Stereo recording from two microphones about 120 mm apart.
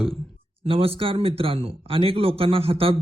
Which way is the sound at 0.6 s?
50° right (ahead or behind).